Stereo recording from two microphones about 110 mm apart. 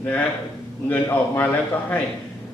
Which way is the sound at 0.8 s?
15° left (ahead or behind).